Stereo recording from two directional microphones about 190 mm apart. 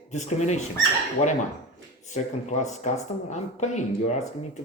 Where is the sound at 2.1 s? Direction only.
40° left (ahead or behind).